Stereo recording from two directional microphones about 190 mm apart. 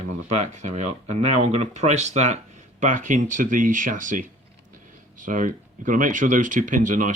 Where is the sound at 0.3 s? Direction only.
35° right (ahead or behind).